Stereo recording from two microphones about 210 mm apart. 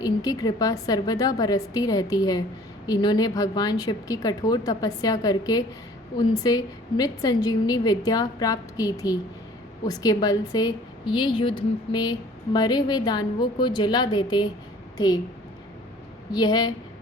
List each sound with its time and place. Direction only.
0.0 s a woman's voice: 15° left (ahead or behind)
16.3 s a woman's voice: 20° left (ahead or behind)